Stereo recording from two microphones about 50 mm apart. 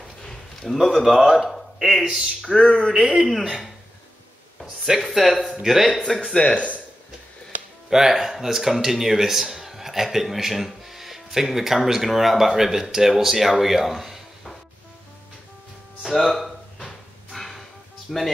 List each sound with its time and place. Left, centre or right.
0.2 s a man's voice: centre
2.0 s speech: centre
2.4 s speech: centre
3.3 s a man's voice: centre
6.4 s speech: left
7.9 s speech: centre
16.0 s drawer open or close: centre
18.1 s a man's voice: centre